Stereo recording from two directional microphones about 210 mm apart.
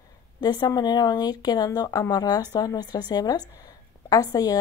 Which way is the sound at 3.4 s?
15° left (ahead or behind).